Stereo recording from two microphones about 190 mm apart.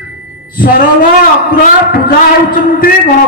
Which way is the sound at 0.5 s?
50° left (ahead or behind).